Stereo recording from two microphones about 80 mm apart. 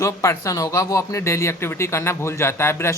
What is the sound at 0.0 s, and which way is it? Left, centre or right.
Speech, left.